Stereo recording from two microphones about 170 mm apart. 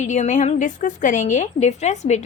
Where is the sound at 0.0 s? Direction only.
45° left (ahead or behind).